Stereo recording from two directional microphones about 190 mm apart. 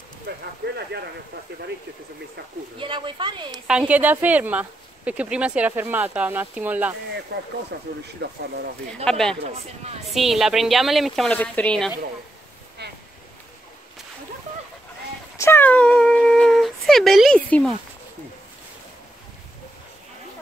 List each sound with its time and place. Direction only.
2.8 s speech: 25° right (ahead or behind)
3.5 s speech: 5° right (ahead or behind)
7.3 s speech: 65° right (ahead or behind)
9.0 s speech: 5° left (ahead or behind)
9.4 s speech: 30° right (ahead or behind)
10.1 s speech: centre (ahead or behind)
15.3 s dog: 15° left (ahead or behind)